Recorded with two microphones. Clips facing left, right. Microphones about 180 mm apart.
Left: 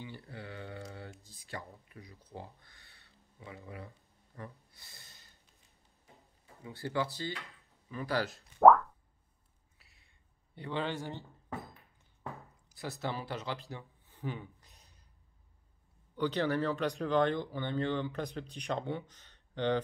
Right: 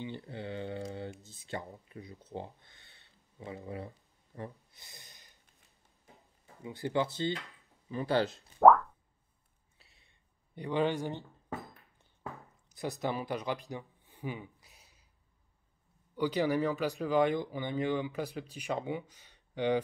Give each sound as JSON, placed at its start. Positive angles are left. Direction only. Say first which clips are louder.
{"t": 0.0, "sound": "mantra", "louder": "right 5 dB", "side_deg": -25}
{"t": 1.2, "sound": "speech", "louder": "right 4 dB", "side_deg": -25}
{"t": 4.4, "sound": "speech", "louder": "right 4 dB", "side_deg": -20}
{"t": 6.6, "sound": "speech", "louder": "right 3 dB", "side_deg": -20}
{"t": 8.5, "sound": "boing", "louder": "even", "side_deg": 0}
{"t": 10.5, "sound": "speech", "louder": "right 6 dB", "side_deg": -15}
{"t": 12.6, "sound": "speech", "louder": "right 4 dB", "side_deg": -20}
{"t": 16.2, "sound": "speech", "louder": "right 2 dB", "side_deg": -10}